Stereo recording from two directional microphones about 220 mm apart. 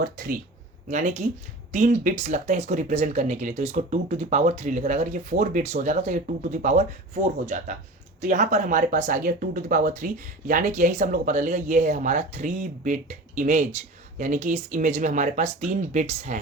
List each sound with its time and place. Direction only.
0.0 s speech: 40° right (ahead or behind)